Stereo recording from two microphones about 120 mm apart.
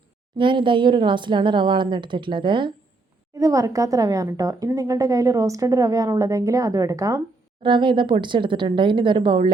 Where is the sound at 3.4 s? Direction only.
25° right (ahead or behind).